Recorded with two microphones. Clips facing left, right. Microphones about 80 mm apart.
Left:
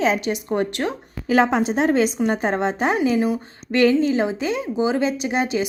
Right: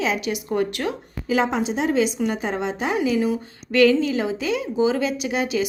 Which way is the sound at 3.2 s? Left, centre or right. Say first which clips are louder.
Left 1 dB; left.